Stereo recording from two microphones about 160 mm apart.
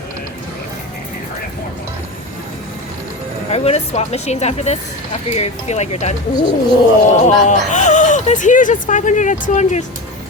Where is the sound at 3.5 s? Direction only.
40° left (ahead or behind).